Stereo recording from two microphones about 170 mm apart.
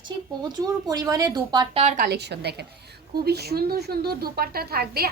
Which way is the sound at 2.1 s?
75° right (ahead or behind).